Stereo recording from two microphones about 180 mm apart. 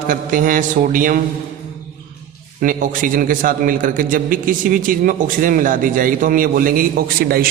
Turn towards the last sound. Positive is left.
turn(degrees=-55)  # may be behind; listen again after turning